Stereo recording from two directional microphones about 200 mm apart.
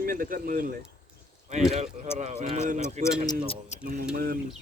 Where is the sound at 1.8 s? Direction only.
35° right (ahead or behind).